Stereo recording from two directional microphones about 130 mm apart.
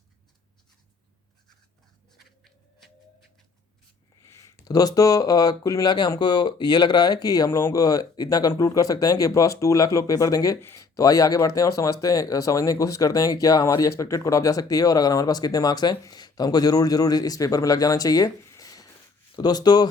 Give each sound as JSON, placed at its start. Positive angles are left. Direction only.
{"t": 2.1, "sound": "writing", "side_deg": 0}
{"t": 4.2, "sound": "speech", "side_deg": 20}